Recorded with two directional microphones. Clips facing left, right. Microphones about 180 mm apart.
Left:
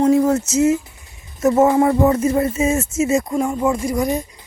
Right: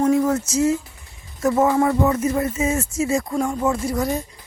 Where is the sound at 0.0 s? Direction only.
25° left (ahead or behind).